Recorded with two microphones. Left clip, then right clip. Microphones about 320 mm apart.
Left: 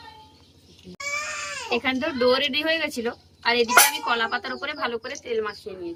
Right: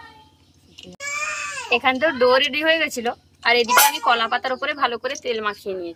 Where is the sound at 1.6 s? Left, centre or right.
Centre.